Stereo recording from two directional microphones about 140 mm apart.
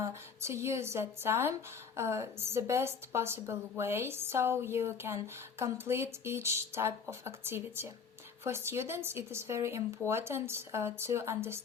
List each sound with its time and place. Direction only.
0.0 s a woman's voice: 20° right (ahead or behind)